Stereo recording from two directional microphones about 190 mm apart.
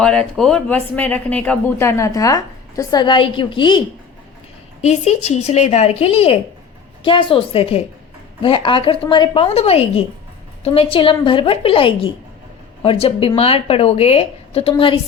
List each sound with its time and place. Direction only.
0.0 s speech: 5° left (ahead or behind); by 3.8 s 25° left (ahead or behind)
4.8 s speech: 35° left (ahead or behind)